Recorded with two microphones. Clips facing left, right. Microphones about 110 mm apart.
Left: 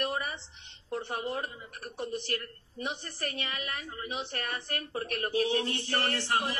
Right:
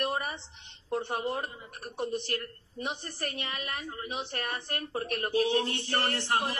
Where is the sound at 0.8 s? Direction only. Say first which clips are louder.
Right 3 dB; 25° right (ahead or behind).